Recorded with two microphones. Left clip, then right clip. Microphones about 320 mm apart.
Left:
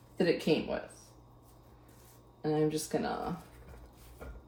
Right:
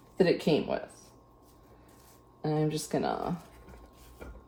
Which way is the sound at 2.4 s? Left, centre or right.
Right.